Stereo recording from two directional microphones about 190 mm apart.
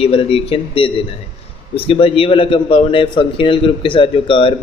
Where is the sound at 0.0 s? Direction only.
30° left (ahead or behind).